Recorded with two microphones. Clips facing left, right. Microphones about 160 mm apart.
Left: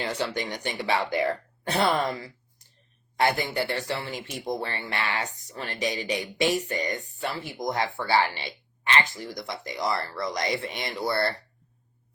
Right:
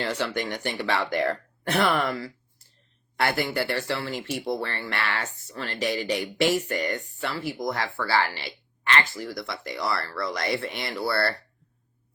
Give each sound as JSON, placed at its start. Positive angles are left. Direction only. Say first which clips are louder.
{"t": 0.2, "sound": "speech", "louder": "right 1 dB", "side_deg": 15}
{"t": 2.0, "sound": "a sound", "louder": "right 1 dB", "side_deg": 20}
{"t": 3.2, "sound": "speech", "louder": "even", "side_deg": 15}